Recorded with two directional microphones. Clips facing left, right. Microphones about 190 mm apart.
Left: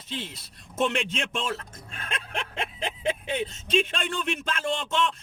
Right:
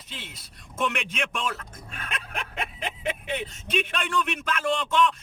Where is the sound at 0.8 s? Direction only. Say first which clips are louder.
Left 2 dB; 30° left (ahead or behind).